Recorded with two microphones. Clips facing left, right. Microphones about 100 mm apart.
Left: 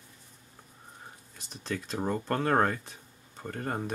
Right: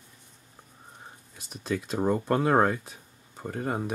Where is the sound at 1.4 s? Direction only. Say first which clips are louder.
Right 5 dB; 5° right (ahead or behind).